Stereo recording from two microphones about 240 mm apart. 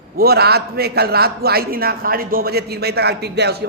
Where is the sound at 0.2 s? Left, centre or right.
Right.